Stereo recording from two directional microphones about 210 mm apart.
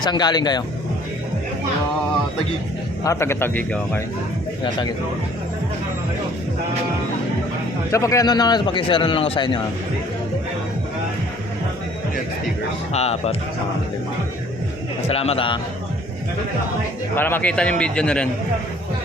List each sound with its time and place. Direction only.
0.0 s a man's voice: 20° left (ahead or behind)
3.0 s speech: 15° left (ahead or behind)
7.9 s a man's voice: 15° left (ahead or behind)
12.9 s speech: 30° left (ahead or behind)
15.0 s a man's voice: 30° left (ahead or behind)
17.2 s a man's voice: 10° left (ahead or behind)